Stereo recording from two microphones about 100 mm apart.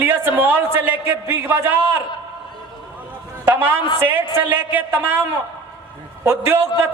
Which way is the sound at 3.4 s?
20° right (ahead or behind).